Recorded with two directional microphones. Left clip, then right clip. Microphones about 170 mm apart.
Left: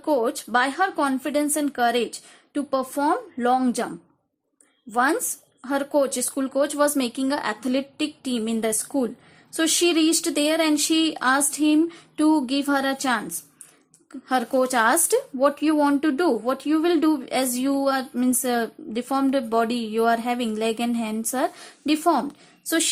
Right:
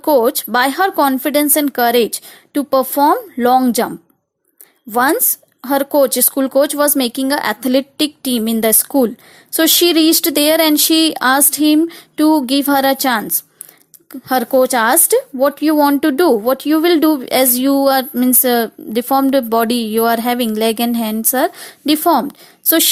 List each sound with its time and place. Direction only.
0.0 s speech: 45° right (ahead or behind)